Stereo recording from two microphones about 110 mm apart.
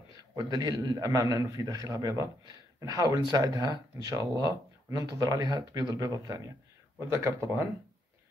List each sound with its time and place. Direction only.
0.1 s a man's voice: 35° right (ahead or behind)
7.0 s speech: 20° right (ahead or behind)